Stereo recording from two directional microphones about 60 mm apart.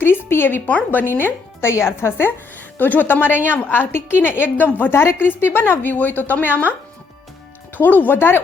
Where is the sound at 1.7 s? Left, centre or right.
Left.